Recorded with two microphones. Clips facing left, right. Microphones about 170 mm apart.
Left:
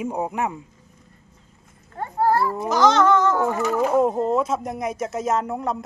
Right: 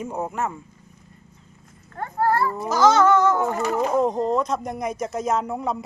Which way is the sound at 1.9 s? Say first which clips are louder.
Left 1 dB; 10° left (ahead or behind).